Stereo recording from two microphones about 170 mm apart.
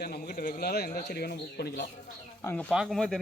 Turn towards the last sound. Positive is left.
turn(degrees=0)  # may be behind; listen again after turning